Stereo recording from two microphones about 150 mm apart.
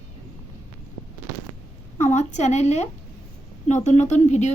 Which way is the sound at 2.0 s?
50° left (ahead or behind).